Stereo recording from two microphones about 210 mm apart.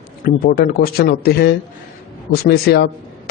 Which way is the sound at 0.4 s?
45° left (ahead or behind).